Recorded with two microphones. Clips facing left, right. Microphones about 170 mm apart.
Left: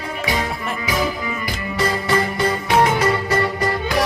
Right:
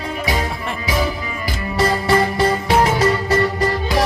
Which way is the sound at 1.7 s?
40° right (ahead or behind).